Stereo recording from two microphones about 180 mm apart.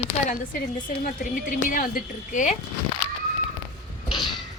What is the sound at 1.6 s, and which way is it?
Speech, 50° left (ahead or behind).